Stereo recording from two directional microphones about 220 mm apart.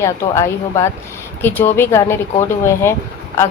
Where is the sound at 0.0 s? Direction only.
15° left (ahead or behind).